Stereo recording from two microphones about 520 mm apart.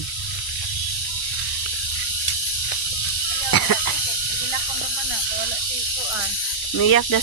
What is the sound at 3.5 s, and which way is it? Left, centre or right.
Snake, left.